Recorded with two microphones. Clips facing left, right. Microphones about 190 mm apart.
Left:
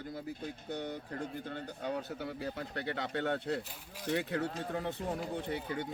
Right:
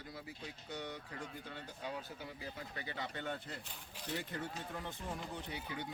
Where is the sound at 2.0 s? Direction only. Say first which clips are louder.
Left 9 dB; 65° left (ahead or behind).